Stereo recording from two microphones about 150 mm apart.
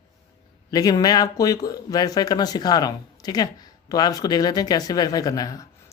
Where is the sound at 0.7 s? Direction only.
25° left (ahead or behind).